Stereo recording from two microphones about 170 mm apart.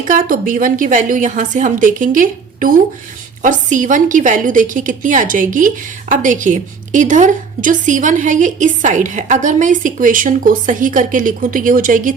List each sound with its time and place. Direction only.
0.1 s a woman's voice: 55° right (ahead or behind)